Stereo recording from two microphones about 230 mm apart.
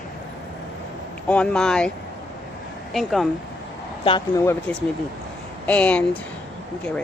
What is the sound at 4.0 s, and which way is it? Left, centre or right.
Speech, left.